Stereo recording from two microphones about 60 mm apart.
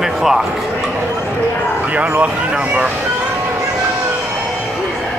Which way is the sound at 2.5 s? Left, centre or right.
Centre.